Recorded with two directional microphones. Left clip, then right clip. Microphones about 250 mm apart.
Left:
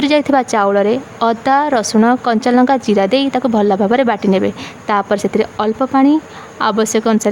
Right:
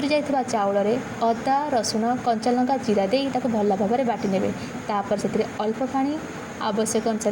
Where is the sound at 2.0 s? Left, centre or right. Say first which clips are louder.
Left 9 dB; left.